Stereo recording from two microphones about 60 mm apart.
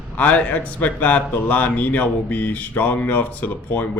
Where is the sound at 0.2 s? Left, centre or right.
Left.